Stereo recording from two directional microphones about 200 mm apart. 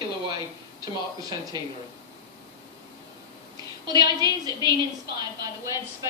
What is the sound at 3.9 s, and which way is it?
Speech, 20° right (ahead or behind).